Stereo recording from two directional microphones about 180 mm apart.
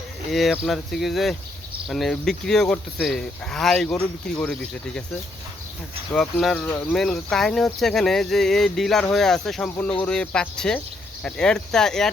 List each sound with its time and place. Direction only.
0.3 s speech: centre (ahead or behind)
6.1 s speech: 5° left (ahead or behind)